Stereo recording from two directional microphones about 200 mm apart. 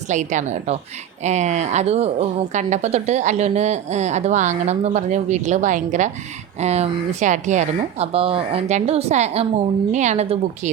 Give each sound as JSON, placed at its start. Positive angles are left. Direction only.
{"t": 0.1, "sound": "a woman's voice", "side_deg": -40}